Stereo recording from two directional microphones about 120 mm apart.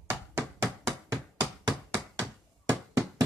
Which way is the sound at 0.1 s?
25° right (ahead or behind).